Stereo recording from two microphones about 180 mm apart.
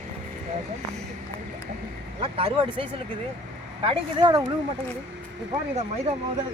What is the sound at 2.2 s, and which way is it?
Speech, 30° right (ahead or behind).